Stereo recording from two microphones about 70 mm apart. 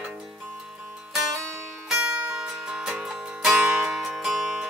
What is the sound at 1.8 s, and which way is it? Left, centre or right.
Music, centre.